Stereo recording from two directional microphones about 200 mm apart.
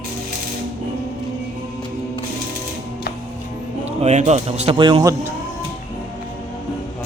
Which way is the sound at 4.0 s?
35° right (ahead or behind).